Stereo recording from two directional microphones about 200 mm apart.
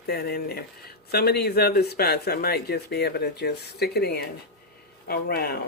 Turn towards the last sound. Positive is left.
turn(degrees=50)  # may be behind; listen again after turning